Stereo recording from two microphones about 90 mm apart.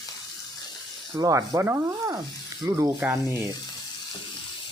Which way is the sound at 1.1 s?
35° right (ahead or behind).